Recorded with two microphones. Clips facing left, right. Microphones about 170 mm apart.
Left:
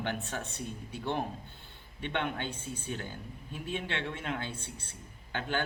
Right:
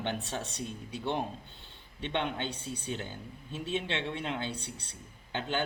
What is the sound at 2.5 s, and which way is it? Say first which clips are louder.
Speech: right 1 dB; 70° right (ahead or behind).